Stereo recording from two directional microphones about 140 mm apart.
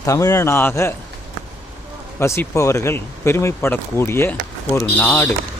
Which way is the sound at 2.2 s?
20° left (ahead or behind).